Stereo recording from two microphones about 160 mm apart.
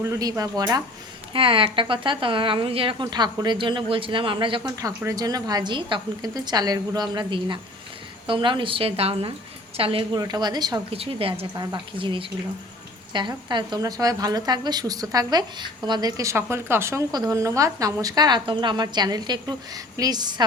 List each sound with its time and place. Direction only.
0.0 s speech: 20° right (ahead or behind)
10.9 s speech: 35° right (ahead or behind)